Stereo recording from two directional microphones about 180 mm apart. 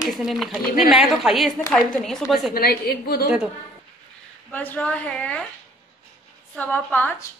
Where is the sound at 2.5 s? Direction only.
60° left (ahead or behind).